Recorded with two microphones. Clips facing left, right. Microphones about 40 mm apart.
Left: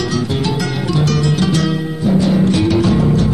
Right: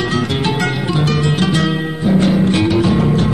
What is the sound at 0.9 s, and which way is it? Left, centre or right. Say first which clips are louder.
Music: left 2 dB; right.